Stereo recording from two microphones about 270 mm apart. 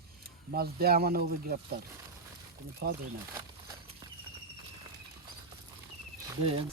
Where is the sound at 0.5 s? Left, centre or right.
Right.